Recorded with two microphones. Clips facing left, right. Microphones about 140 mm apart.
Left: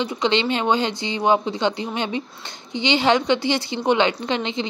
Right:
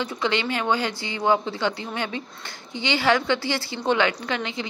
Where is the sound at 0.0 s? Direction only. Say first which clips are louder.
Left 4 dB; 20° left (ahead or behind).